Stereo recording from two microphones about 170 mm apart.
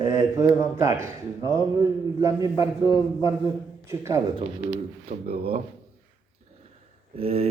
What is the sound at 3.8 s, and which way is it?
Speech, 15° right (ahead or behind).